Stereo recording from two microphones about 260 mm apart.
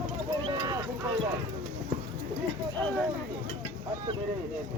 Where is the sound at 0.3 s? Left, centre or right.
Centre.